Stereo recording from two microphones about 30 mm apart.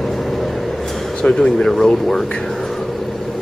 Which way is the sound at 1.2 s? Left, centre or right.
Left.